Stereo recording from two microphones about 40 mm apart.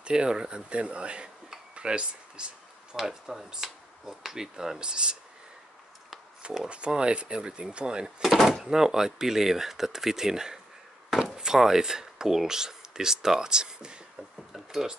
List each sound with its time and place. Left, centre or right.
0.0 s speech: right
1.8 s a sound: right
3.0 s speech: centre
6.7 s speech: right
8.5 s speech: centre
14.5 s a sound: centre